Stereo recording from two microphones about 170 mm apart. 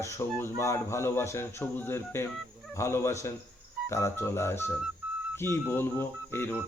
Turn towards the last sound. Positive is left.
turn(degrees=15)  # may be behind; listen again after turning